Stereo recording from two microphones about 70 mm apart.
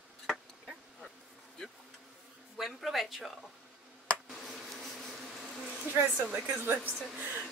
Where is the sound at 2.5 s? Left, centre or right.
Centre.